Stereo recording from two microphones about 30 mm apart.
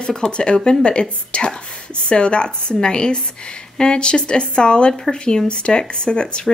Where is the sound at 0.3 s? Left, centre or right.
Left.